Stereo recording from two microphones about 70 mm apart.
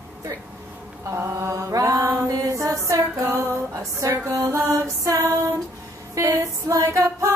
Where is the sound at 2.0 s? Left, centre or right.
Right.